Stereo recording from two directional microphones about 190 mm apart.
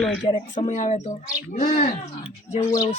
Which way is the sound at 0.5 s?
40° left (ahead or behind).